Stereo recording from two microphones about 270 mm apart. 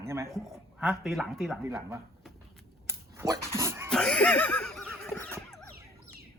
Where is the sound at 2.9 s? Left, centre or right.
Centre.